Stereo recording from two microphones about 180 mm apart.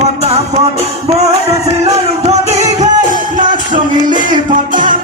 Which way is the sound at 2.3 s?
35° right (ahead or behind).